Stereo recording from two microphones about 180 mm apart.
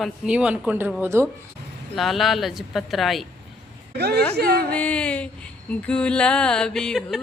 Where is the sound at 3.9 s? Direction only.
65° right (ahead or behind).